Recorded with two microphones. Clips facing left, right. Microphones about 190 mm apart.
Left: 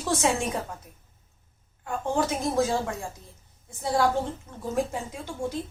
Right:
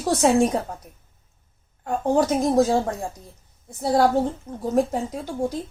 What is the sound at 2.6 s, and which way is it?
Speech, 35° right (ahead or behind).